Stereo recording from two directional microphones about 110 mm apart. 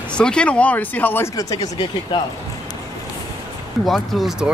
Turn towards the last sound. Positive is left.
turn(degrees=0)  # may be behind; listen again after turning